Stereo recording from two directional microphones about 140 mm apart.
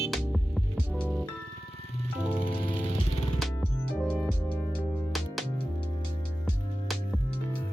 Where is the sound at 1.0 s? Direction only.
10° left (ahead or behind).